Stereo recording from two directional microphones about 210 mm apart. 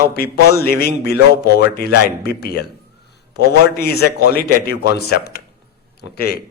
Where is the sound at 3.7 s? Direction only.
50° left (ahead or behind).